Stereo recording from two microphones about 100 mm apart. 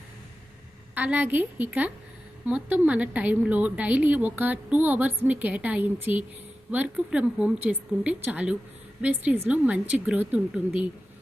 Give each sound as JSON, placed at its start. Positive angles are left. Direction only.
{"t": 0.9, "sound": "a woman's voice", "side_deg": -15}